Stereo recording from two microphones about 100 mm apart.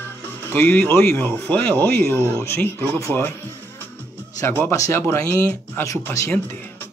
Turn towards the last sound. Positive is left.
turn(degrees=30)  # may be behind; listen again after turning